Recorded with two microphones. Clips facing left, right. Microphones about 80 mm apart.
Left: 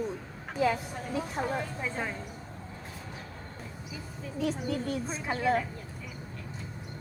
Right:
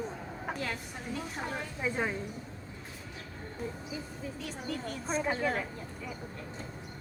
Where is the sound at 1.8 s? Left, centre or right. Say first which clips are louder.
Right 2 dB; centre.